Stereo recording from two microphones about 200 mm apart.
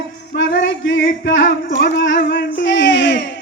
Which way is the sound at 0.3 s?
65° left (ahead or behind).